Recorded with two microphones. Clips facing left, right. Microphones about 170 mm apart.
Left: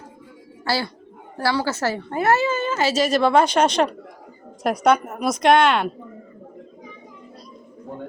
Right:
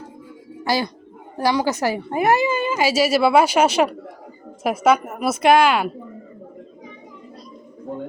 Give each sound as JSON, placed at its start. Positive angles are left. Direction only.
{"t": 0.6, "sound": "a woman's voice", "side_deg": -15}